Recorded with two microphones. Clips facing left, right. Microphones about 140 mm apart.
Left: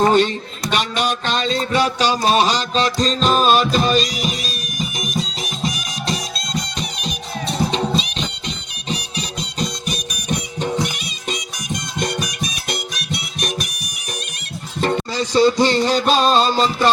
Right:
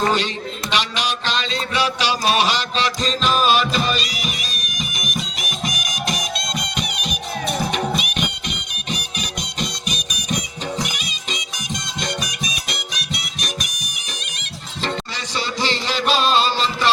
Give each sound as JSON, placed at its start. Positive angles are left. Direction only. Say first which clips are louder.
{"t": 0.7, "sound": "a sound", "louder": "left 4 dB", "side_deg": 50}
{"t": 12.0, "sound": "music", "louder": "left 3 dB", "side_deg": 50}
{"t": 14.8, "sound": "music", "louder": "left 7 dB", "side_deg": 40}